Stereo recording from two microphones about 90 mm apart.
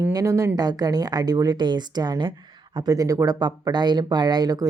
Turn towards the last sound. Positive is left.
turn(degrees=-45)  # may be behind; listen again after turning